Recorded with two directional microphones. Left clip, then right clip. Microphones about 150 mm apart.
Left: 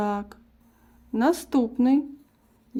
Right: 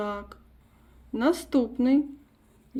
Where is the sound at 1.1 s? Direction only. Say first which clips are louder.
Left 2 dB; 65° left (ahead or behind).